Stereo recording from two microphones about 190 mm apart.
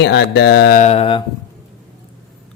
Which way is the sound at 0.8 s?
35° left (ahead or behind).